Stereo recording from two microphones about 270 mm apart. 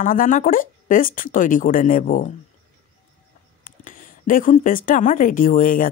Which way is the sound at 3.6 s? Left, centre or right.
Left.